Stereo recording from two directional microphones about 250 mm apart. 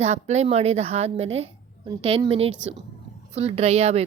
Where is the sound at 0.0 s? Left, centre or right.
Right.